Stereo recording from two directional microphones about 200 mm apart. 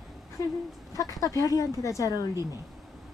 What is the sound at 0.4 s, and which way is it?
Speech, 15° left (ahead or behind).